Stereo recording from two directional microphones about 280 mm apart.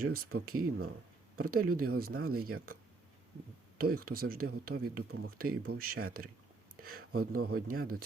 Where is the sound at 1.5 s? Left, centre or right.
Right.